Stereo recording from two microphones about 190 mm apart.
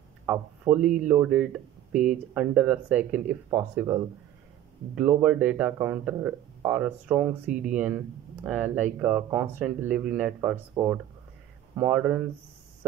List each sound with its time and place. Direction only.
0.3 s a man's voice: 5° right (ahead or behind)